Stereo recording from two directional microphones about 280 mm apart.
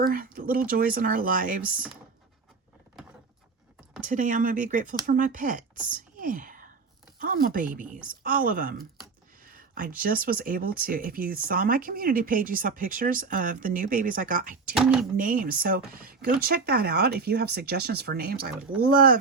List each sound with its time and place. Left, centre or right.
0.0 s speech: right
4.0 s speech: right
5.9 s whispering: right
7.2 s speech: right
14.8 s speech: centre
15.1 s speech: right